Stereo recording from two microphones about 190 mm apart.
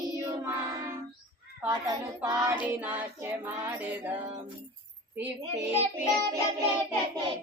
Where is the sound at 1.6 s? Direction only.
15° right (ahead or behind).